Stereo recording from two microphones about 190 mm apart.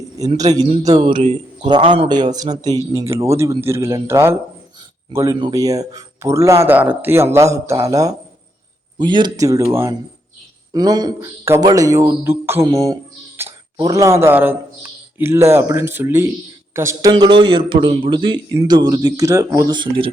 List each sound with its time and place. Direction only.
0.3 s a man's voice: 20° right (ahead or behind)
0.6 s a man's voice: 35° right (ahead or behind)
0.9 s a man's voice: 25° right (ahead or behind)